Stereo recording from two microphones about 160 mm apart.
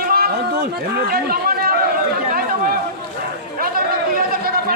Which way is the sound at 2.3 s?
60° right (ahead or behind).